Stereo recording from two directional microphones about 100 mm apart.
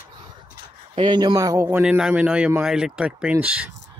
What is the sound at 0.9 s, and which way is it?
Speech, 50° right (ahead or behind).